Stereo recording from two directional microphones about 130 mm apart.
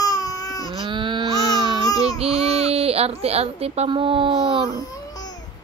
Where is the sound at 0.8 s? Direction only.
40° right (ahead or behind).